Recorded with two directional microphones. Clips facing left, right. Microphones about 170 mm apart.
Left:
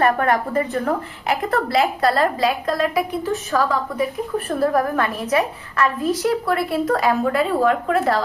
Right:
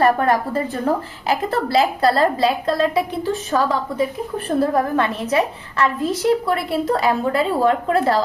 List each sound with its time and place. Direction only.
0.0 s a woman's voice: 30° right (ahead or behind)